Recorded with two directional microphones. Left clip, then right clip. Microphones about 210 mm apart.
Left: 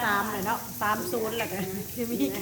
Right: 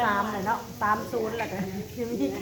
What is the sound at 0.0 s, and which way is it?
Frying, 55° left (ahead or behind).